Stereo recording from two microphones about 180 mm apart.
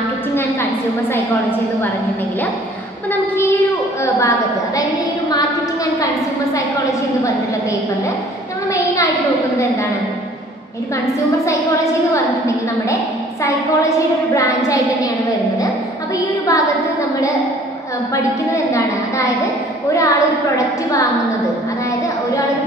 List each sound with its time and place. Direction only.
11.4 s a woman's voice: 15° left (ahead or behind)
13.4 s a woman's voice: 15° left (ahead or behind)
18.1 s a woman's voice: 15° left (ahead or behind)